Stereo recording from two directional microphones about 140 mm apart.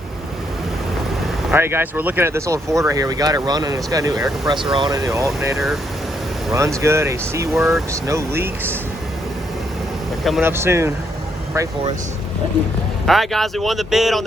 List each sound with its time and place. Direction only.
1.5 s speech: 15° right (ahead or behind); by 4.9 s 35° right (ahead or behind)
5.0 s speech: 20° right (ahead or behind)
5.5 s speech: centre (ahead or behind)
6.5 s speech: 20° right (ahead or behind)
10.4 s speech: 15° right (ahead or behind)
13.1 s speech: centre (ahead or behind)